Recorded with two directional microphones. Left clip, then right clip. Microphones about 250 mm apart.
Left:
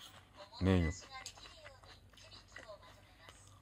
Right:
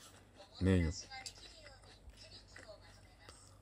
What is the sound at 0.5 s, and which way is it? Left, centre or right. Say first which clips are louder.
Speech: left 1 dB; centre.